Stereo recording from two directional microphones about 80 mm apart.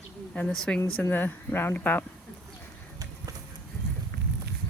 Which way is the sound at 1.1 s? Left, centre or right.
Left.